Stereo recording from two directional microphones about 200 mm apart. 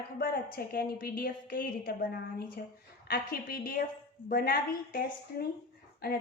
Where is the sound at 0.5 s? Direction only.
45° left (ahead or behind).